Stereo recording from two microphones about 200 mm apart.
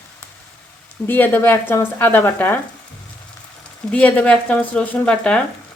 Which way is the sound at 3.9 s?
5° left (ahead or behind).